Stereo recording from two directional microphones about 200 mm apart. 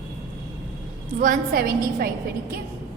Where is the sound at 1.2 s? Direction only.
45° right (ahead or behind).